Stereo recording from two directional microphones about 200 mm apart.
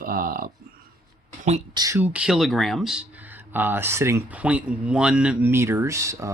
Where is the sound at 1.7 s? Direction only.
15° right (ahead or behind).